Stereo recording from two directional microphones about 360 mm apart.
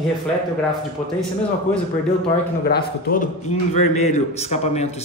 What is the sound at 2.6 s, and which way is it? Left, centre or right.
A man's voice, left.